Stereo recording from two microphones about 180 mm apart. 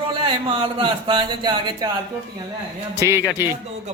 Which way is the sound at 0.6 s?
25° right (ahead or behind).